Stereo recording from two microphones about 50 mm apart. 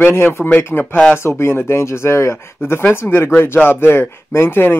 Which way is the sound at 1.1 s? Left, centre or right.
Left.